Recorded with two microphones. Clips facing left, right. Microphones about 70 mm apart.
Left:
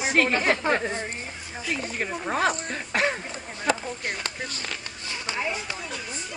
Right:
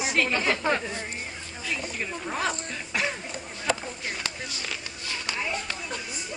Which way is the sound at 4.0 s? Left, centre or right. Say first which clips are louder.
Left 2 dB; left.